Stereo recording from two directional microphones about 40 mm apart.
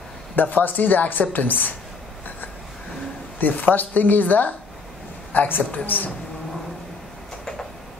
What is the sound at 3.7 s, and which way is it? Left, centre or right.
A woman's voice, left.